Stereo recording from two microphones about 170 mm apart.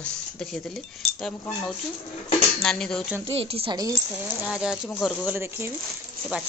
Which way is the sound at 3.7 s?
20° right (ahead or behind).